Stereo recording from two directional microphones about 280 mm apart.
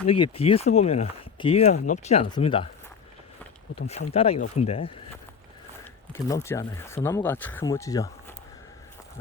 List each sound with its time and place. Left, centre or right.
0.1 s speech: centre
3.8 s speech: left